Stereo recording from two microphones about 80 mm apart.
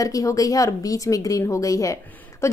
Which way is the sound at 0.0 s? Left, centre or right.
Left.